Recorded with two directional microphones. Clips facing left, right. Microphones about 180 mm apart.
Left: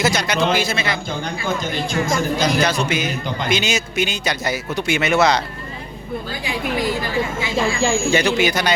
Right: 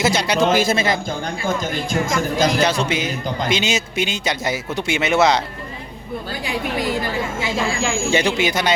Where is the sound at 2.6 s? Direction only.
30° right (ahead or behind).